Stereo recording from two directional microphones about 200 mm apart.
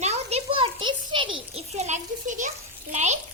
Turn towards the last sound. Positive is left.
turn(degrees=-35)  # may be behind; listen again after turning